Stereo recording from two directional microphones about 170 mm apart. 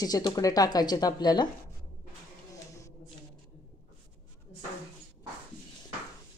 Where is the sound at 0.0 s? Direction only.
25° left (ahead or behind).